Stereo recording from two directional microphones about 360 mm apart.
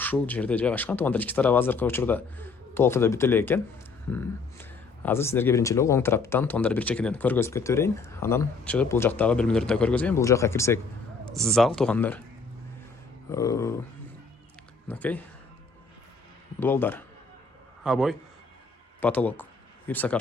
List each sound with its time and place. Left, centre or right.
0.0 s speech: centre
5.0 s speech: centre
13.3 s speech: centre
14.8 s speech: centre
16.6 s speech: centre